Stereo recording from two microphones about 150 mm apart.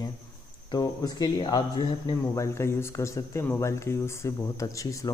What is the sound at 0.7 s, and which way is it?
A man's voice, 25° left (ahead or behind).